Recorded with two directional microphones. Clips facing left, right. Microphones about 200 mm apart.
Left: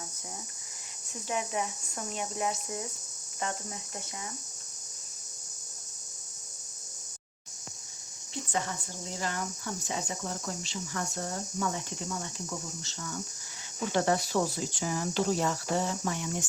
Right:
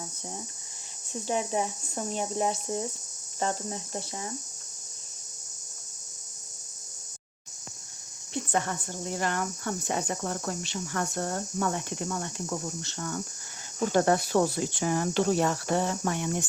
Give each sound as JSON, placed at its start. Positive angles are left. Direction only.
{"t": 1.1, "sound": "speech", "side_deg": -30}
{"t": 8.3, "sound": "speech", "side_deg": -55}